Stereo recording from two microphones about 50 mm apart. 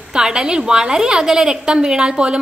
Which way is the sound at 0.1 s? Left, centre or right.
Centre.